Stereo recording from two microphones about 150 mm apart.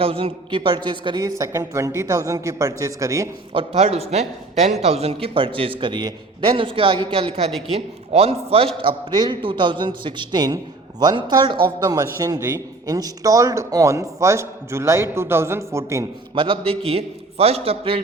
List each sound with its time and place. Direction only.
0.0 s speech: 40° right (ahead or behind)
1.4 s a man's voice: 20° right (ahead or behind)
3.5 s a man's voice: 40° right (ahead or behind); by 16.0 s 20° right (ahead or behind)
16.3 s speech: 35° right (ahead or behind)